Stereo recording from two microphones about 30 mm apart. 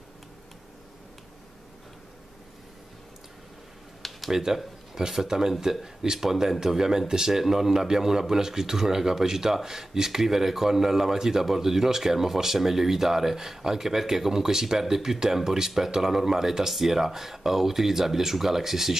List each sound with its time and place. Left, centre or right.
4.3 s a man's voice: centre